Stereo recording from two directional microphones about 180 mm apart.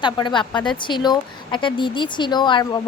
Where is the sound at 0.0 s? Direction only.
25° left (ahead or behind).